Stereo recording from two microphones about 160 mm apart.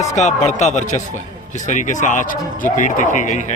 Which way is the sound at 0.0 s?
45° left (ahead or behind).